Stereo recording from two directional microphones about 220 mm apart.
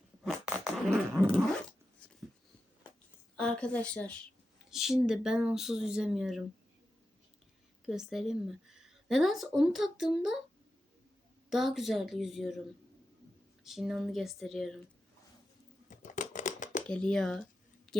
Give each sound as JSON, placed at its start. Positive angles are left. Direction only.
{"t": 0.3, "sound": "dog", "side_deg": -5}
{"t": 3.3, "sound": "a woman's voice", "side_deg": 5}
{"t": 7.9, "sound": "a woman's voice", "side_deg": 0}
{"t": 11.4, "sound": "a woman's voice", "side_deg": 0}
{"t": 13.7, "sound": "a woman's voice", "side_deg": 0}
{"t": 15.9, "sound": "a sound", "side_deg": 35}
{"t": 16.8, "sound": "a woman's voice", "side_deg": 5}